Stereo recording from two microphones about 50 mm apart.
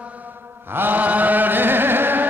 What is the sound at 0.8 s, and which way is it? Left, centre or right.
Chant, right.